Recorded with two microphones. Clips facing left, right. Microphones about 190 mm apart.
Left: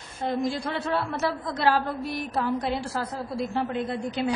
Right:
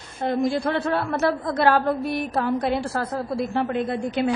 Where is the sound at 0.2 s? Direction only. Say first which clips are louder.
Right 5 dB; 55° right (ahead or behind).